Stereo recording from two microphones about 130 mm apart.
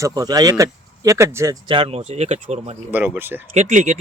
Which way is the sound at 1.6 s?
40° right (ahead or behind).